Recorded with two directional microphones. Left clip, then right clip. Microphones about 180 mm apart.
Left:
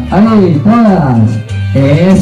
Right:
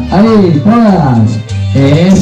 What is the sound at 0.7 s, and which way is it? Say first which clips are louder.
Speech: even; 15° right (ahead or behind).